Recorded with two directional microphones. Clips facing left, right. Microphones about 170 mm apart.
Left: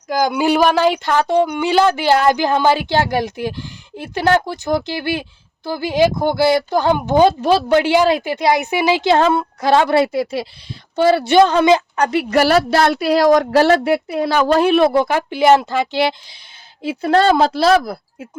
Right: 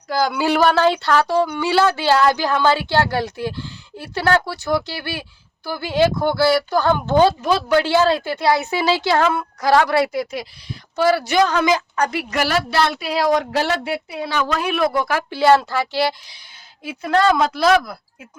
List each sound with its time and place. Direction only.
0.1 s a woman's voice: 15° left (ahead or behind)
7.3 s a woman's voice: 25° left (ahead or behind)